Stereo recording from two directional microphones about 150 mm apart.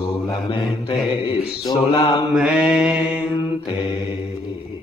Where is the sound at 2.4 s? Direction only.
5° right (ahead or behind).